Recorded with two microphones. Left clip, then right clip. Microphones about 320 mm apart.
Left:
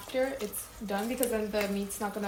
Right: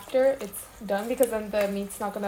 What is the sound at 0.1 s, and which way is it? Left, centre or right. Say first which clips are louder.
A woman's voice: right 8 dB; right.